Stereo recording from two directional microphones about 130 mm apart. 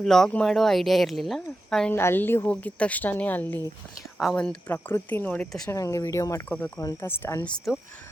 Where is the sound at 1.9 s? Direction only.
15° left (ahead or behind).